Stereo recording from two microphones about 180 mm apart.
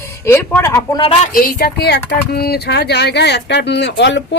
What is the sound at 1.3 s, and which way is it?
Speech, 55° left (ahead or behind).